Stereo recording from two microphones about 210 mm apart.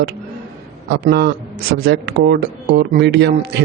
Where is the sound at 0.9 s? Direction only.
50° right (ahead or behind).